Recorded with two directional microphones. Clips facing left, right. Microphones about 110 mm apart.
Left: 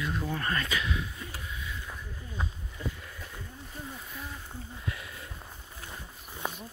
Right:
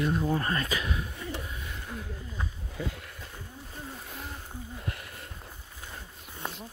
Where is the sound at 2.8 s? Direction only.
90° right.